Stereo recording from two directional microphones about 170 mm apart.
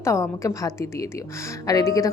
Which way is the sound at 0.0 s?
15° left (ahead or behind).